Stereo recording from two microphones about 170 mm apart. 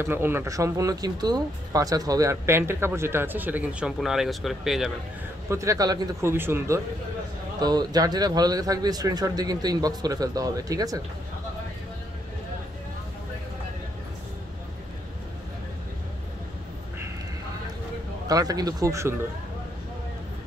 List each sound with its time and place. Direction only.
0.0 s speech: 15° right (ahead or behind)
5.5 s speech: 15° right (ahead or behind)
18.2 s speech: 20° right (ahead or behind)